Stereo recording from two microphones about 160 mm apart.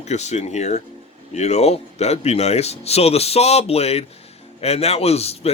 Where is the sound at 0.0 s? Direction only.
45° left (ahead or behind).